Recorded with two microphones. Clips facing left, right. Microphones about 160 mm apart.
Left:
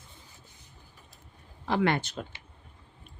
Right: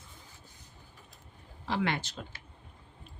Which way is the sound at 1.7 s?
50° left (ahead or behind).